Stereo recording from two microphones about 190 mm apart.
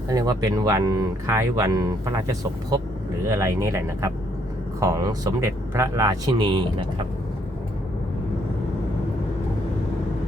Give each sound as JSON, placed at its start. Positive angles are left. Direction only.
{"t": 0.1, "sound": "speech", "side_deg": -20}